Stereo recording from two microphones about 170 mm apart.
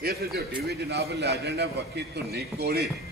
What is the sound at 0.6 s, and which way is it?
Speech, 75° right (ahead or behind).